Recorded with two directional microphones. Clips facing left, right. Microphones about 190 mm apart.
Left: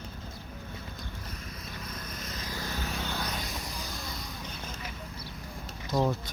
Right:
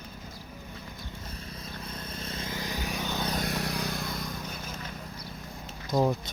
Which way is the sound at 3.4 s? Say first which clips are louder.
Right 7 dB; 65° right (ahead or behind).